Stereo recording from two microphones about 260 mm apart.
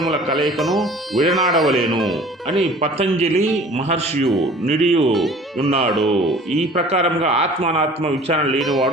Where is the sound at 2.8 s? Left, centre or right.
Right.